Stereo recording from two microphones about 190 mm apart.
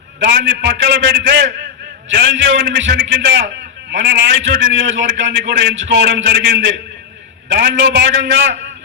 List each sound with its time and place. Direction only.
0.2 s a man's voice: 65° right (ahead or behind)